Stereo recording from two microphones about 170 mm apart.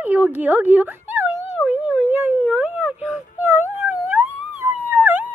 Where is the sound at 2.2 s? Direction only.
10° right (ahead or behind).